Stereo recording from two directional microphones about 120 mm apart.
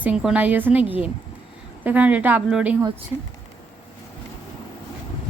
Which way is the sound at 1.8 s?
15° right (ahead or behind).